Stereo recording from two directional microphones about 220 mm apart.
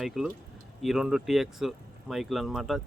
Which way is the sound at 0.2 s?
Centre (ahead or behind).